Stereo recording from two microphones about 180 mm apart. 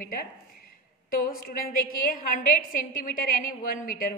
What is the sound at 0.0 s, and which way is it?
A woman's voice, 55° left (ahead or behind).